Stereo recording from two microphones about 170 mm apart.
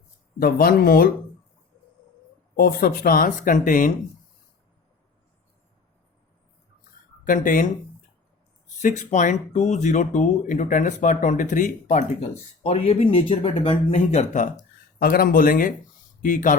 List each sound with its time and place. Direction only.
0.3 s speech: 60° left (ahead or behind)
2.6 s speech: 60° left (ahead or behind)
7.3 s speech: 55° left (ahead or behind)
8.8 s speech: 45° left (ahead or behind)
12.6 s speech: 35° left (ahead or behind); by 16.6 s 50° left (ahead or behind)